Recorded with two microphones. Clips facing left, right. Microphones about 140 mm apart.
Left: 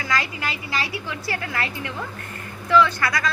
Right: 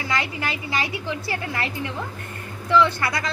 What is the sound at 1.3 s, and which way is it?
A woman's voice, 20° right (ahead or behind).